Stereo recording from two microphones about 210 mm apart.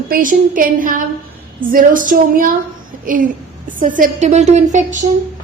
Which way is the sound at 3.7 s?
40° right (ahead or behind).